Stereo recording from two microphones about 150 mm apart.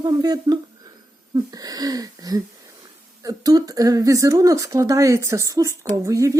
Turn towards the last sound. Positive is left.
turn(degrees=-20)  # may be behind; listen again after turning